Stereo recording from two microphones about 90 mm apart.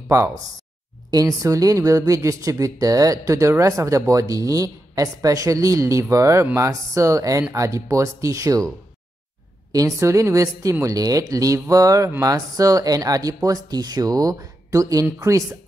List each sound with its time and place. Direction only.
0.1 s speech: 35° right (ahead or behind)
9.7 s speech: 40° right (ahead or behind)